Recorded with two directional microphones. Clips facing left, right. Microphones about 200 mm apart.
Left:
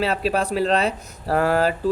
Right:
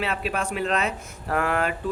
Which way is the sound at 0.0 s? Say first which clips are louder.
Left 6 dB; 35° left (ahead or behind).